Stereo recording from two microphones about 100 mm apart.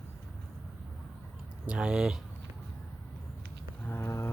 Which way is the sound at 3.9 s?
25° left (ahead or behind).